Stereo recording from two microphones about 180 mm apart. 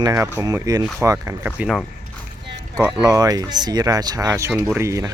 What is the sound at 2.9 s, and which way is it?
Speech, 20° right (ahead or behind).